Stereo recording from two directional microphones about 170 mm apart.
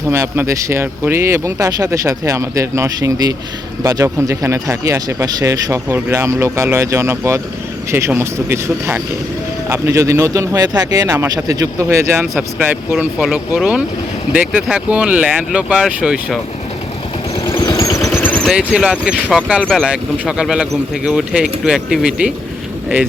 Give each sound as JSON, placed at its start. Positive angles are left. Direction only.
{"t": 0.1, "sound": "speech", "side_deg": -15}
{"t": 17.4, "sound": "vehicle", "side_deg": 20}
{"t": 18.5, "sound": "speech", "side_deg": -5}